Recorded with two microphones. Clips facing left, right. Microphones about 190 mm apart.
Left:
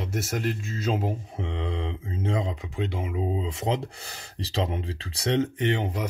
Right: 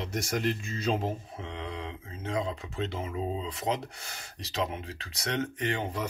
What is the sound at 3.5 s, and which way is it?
Speech, 25° left (ahead or behind).